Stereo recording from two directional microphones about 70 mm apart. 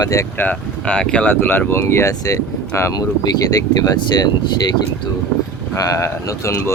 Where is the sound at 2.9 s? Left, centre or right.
Left.